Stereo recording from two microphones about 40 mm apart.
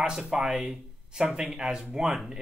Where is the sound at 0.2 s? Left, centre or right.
Centre.